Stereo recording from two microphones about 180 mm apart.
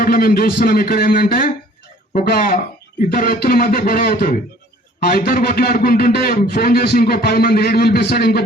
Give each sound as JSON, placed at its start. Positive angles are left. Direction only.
{"t": 0.0, "sound": "a man's voice", "side_deg": 55}